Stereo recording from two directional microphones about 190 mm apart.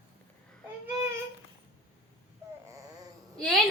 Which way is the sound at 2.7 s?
20° right (ahead or behind).